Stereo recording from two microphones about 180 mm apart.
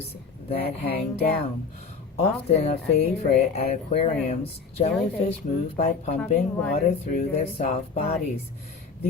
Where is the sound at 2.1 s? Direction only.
35° left (ahead or behind).